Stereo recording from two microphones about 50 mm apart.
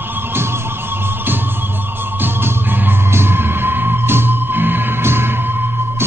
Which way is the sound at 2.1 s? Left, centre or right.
Right.